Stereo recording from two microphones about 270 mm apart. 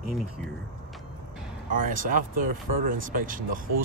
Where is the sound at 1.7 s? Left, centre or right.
Right.